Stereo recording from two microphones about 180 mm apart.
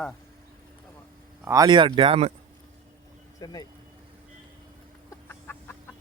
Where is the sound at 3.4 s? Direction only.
20° left (ahead or behind).